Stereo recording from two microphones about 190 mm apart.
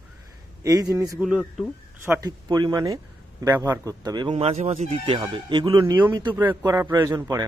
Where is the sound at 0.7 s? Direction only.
15° right (ahead or behind).